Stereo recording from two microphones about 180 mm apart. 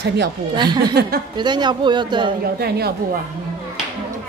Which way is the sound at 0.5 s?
25° right (ahead or behind).